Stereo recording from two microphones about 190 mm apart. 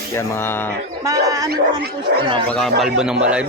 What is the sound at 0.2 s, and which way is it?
Speech, 10° left (ahead or behind).